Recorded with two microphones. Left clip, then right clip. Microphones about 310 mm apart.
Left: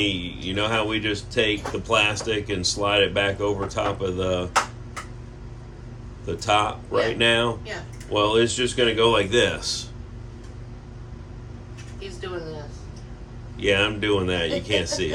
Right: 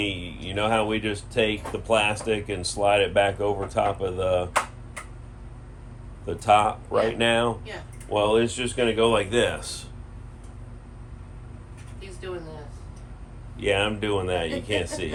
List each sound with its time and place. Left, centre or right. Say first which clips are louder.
0.0 s speech: left 4 dB; right
6.2 s speech: right 2 dB; right
13.6 s speech: left 3 dB; right